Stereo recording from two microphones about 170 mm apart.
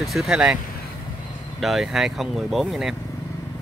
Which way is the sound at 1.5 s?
Centre (ahead or behind).